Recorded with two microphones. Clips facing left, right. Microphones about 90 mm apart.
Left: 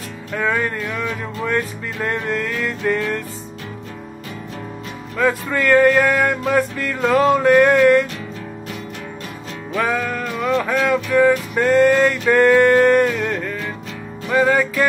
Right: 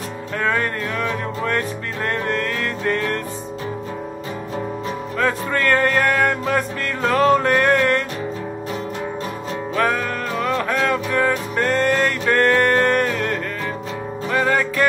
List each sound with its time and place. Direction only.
0.4 s music: 5° left (ahead or behind)
5.2 s music: 5° left (ahead or behind)
9.8 s music: 5° left (ahead or behind)